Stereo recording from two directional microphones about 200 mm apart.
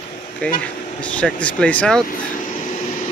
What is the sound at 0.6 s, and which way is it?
Speech, 5° left (ahead or behind).